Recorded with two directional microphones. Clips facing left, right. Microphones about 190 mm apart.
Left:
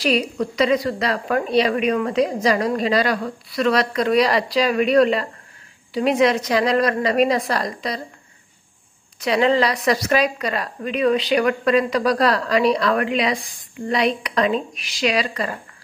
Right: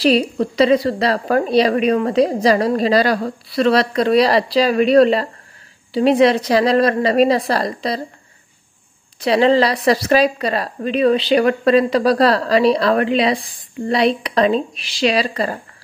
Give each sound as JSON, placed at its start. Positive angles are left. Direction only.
{"t": 0.0, "sound": "a woman's voice", "side_deg": -30}
{"t": 9.2, "sound": "a woman's voice", "side_deg": -30}